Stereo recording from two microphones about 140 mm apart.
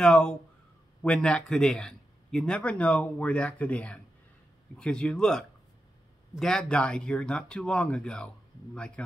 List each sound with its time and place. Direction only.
0.0 s a man's voice: 5° left (ahead or behind)